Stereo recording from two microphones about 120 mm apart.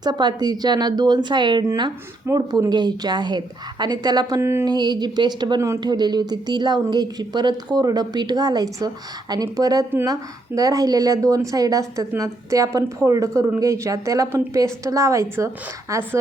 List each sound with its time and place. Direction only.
0.0 s speech: 40° right (ahead or behind)
1.6 s speech: 30° right (ahead or behind)
4.4 s a woman's voice: 20° right (ahead or behind)
4.6 s a woman's voice: 35° right (ahead or behind)